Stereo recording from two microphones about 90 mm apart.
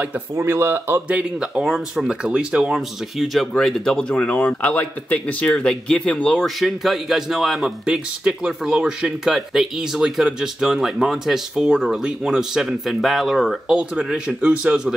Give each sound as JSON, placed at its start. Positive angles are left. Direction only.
{"t": 0.4, "sound": "speech", "side_deg": -30}
{"t": 3.2, "sound": "speech", "side_deg": 0}
{"t": 6.6, "sound": "speech", "side_deg": 0}